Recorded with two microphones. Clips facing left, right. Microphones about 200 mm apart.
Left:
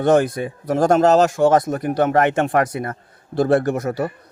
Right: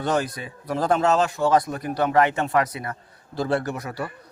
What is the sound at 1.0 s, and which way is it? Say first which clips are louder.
A man's voice: left 7 dB; 40° left (ahead or behind).